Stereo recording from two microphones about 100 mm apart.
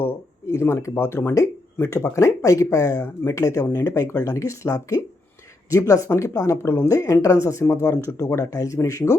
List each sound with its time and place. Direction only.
0.0 s speech: 25° left (ahead or behind)